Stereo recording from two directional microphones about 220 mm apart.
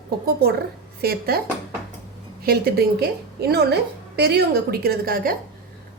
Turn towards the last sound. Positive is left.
turn(degrees=-40)  # may be behind; listen again after turning